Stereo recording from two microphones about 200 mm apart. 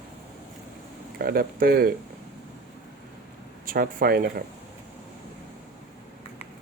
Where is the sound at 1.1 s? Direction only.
50° right (ahead or behind).